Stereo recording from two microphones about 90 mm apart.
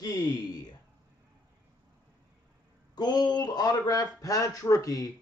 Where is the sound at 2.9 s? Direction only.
50° left (ahead or behind).